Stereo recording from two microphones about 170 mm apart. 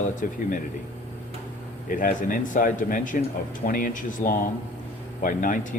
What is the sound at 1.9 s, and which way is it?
Speech, 50° left (ahead or behind).